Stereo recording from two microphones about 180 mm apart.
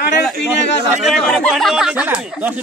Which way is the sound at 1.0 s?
5° left (ahead or behind).